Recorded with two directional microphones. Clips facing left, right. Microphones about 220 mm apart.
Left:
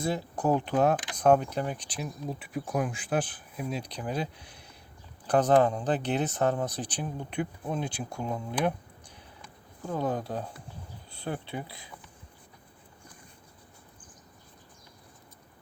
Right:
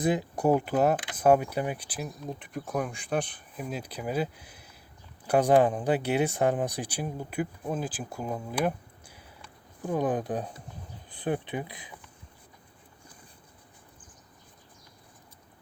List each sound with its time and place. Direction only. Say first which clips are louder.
0.0 s speech: right 3 dB; 15° right (ahead or behind)